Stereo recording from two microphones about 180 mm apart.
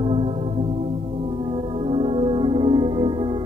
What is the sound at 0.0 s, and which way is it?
Music, 30° right (ahead or behind).